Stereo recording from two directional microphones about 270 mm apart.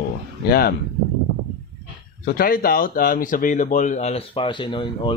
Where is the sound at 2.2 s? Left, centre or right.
Left; by 5.1 s centre.